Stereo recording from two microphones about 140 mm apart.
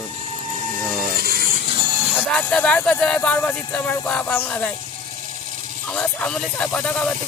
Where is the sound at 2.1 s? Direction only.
10° left (ahead or behind).